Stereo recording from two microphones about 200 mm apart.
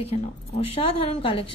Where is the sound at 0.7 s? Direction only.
30° left (ahead or behind).